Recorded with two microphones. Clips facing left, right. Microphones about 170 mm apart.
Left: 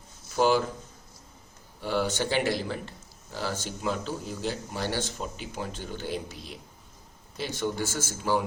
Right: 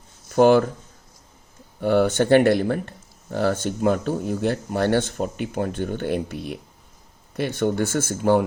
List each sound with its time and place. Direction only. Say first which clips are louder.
0.3 s speech: right 8 dB; 55° right (ahead or behind)
1.8 s speech: right 9 dB; 55° right (ahead or behind)